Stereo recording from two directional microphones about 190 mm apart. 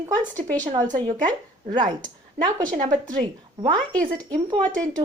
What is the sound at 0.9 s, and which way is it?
Speech, 25° right (ahead or behind).